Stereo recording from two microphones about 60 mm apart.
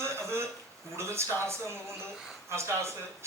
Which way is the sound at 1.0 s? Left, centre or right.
Right.